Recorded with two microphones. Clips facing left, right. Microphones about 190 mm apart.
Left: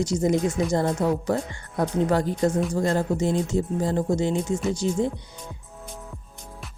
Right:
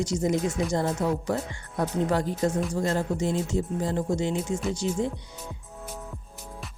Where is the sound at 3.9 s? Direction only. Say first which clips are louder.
Left 3 dB; 40° left (ahead or behind).